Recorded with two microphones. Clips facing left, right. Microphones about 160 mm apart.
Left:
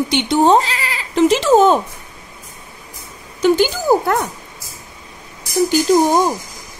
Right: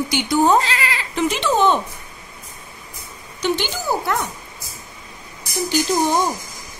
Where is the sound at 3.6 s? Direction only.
45° left (ahead or behind).